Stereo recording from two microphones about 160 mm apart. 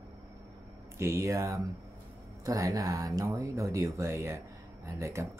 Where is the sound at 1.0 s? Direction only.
20° right (ahead or behind).